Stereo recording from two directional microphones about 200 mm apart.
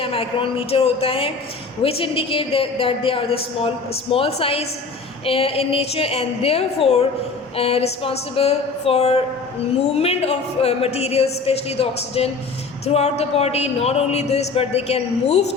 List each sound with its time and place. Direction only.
0.0 s a woman's voice: 25° left (ahead or behind)